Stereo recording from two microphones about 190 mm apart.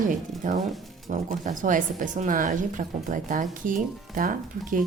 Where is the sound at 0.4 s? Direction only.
45° right (ahead or behind).